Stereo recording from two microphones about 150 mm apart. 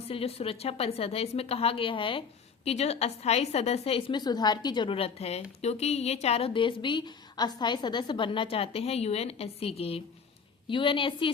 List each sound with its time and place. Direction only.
0.1 s a woman's voice: 40° left (ahead or behind)